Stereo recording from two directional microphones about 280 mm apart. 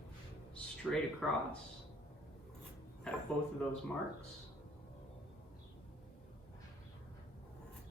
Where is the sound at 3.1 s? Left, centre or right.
Centre.